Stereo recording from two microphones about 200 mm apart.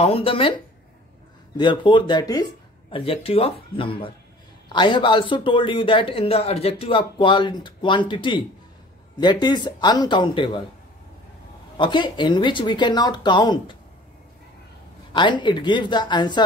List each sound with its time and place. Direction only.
0.0 s speech: 30° left (ahead or behind)
1.6 s speech: 25° left (ahead or behind)
11.7 s speech: 25° left (ahead or behind)
15.1 s speech: 25° left (ahead or behind)